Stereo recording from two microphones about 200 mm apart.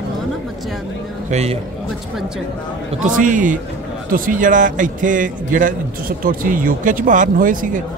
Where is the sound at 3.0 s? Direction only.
40° right (ahead or behind).